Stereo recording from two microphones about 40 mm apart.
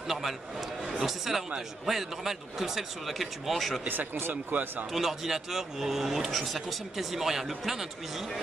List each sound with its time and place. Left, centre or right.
0.1 s speech: centre
3.8 s speech: right
4.3 s speech: right
4.9 s speech: centre